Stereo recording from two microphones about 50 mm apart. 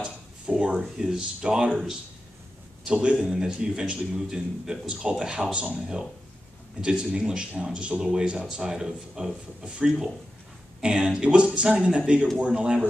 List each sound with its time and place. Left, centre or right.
0.0 s a sound: centre
0.9 s a man's voice: centre
2.8 s a man's voice: centre